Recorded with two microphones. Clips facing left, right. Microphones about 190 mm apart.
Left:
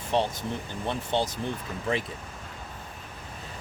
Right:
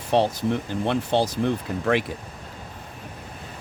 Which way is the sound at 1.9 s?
80° right.